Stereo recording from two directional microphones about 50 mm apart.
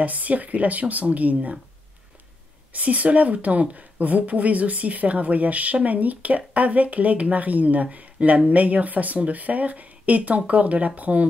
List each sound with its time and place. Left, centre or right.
0.0 s speech: right
2.7 s speech: right